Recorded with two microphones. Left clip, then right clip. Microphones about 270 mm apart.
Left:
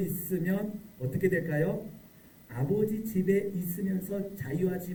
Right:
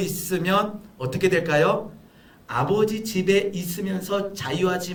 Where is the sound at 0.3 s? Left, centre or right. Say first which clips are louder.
Right 14 dB; right.